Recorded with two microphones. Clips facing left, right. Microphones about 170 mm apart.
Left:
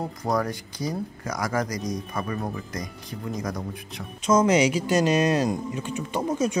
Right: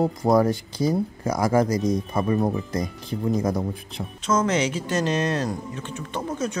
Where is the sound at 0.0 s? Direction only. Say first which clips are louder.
Right 7 dB; 30° right (ahead or behind).